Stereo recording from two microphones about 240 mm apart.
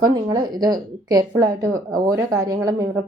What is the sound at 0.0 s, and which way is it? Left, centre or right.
Speech, centre.